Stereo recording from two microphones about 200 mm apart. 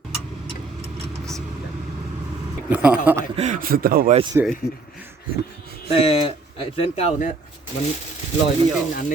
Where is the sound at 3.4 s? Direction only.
40° right (ahead or behind).